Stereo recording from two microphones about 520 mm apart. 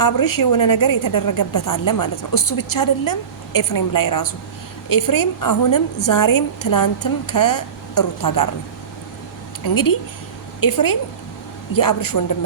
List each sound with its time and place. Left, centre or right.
0.0 s a woman's voice: left
9.7 s a woman's voice: left